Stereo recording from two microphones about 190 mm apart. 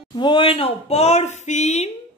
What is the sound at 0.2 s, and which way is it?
Speech, 25° left (ahead or behind).